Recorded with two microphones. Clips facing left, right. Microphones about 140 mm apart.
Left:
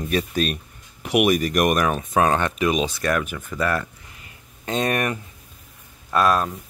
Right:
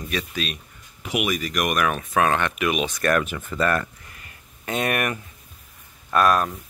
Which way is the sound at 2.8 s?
10° left (ahead or behind).